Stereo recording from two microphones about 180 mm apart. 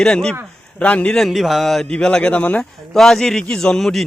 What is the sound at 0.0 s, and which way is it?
A man's voice, 5° left (ahead or behind).